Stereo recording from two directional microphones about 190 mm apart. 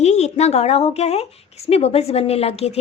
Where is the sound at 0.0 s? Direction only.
35° left (ahead or behind).